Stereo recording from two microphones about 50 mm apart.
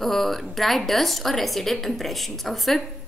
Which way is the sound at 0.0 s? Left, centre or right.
Centre.